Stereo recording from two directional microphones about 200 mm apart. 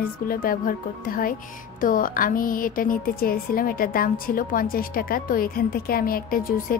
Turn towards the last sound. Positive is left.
turn(degrees=45)  # may be behind; listen again after turning